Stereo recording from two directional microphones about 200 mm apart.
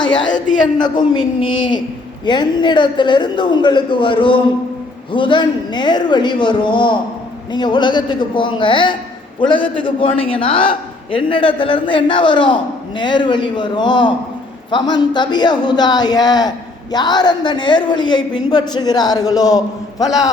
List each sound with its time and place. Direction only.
0.8 s a man's voice: 25° left (ahead or behind)